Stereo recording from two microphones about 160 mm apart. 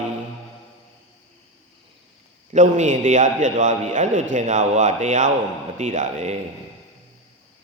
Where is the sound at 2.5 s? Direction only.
50° right (ahead or behind).